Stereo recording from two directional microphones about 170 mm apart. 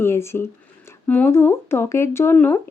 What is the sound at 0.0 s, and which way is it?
Speech, 15° left (ahead or behind).